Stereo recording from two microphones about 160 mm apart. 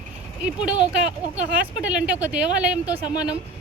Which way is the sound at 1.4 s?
10° right (ahead or behind).